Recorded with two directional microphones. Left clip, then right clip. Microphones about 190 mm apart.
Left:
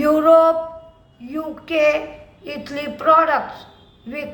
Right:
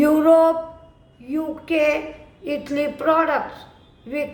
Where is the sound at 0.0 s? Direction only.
20° right (ahead or behind).